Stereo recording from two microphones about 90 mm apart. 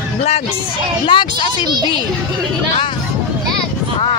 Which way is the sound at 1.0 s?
65° left (ahead or behind).